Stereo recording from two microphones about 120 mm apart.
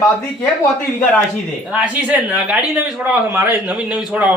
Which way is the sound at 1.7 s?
10° right (ahead or behind).